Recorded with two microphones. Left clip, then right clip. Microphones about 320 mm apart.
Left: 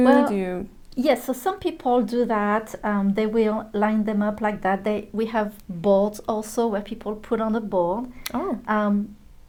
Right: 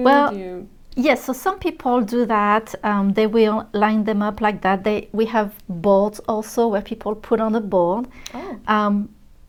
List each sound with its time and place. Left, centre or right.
0.0 s speech: right
0.3 s speech: left
0.9 s speech: right
8.2 s speech: left
8.6 s speech: right